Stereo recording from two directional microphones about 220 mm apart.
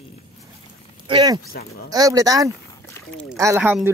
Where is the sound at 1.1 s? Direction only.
20° right (ahead or behind).